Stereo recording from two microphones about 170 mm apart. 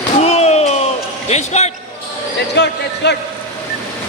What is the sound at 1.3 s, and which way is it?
Speech, 40° left (ahead or behind).